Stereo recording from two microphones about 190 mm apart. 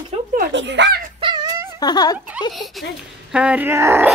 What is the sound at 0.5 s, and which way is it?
Speech, 70° right (ahead or behind).